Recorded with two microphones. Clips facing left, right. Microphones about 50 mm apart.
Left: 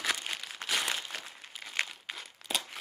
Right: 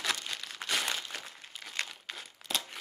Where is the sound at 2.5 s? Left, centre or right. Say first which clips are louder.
Left 1 dB; centre.